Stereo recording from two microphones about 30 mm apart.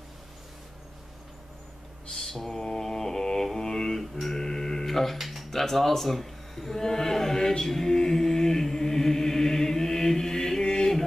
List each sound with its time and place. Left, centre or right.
2.1 s mantra: centre
4.3 s printer: centre
4.8 s speech: centre
5.2 s a sound: centre